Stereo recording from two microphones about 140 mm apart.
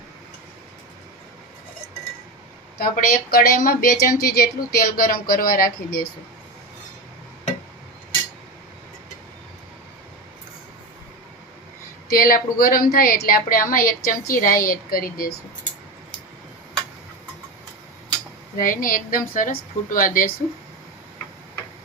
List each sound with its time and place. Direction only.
2.7 s a woman's voice: 90° left
12.0 s a woman's voice: 90° left
18.5 s speech: 80° left